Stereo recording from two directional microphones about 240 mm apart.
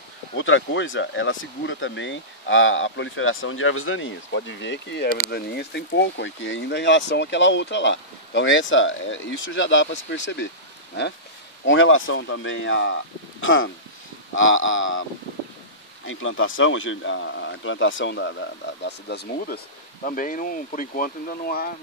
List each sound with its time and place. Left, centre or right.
0.4 s speech: left
11.6 s speech: left
16.1 s speech: left